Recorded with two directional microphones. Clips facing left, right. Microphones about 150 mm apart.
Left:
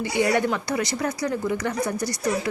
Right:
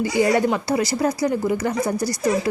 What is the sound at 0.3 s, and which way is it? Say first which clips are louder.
A woman's voice: right 4 dB; 30° right (ahead or behind).